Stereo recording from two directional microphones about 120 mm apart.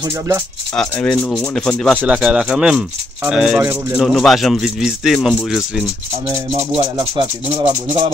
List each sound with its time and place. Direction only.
0.7 s speech: 5° left (ahead or behind)
2.0 s speech: 10° right (ahead or behind)
6.5 s music: 50° right (ahead or behind)